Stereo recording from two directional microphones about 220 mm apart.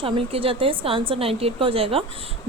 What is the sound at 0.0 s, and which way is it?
A woman's voice, 25° right (ahead or behind).